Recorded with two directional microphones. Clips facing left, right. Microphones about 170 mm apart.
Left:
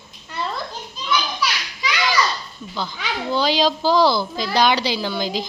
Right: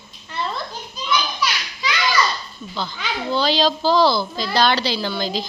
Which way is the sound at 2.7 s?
10° left (ahead or behind).